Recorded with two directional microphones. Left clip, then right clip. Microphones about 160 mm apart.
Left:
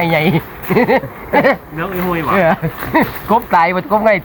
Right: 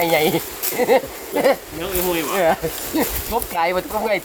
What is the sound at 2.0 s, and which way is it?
Speech, 35° right (ahead or behind).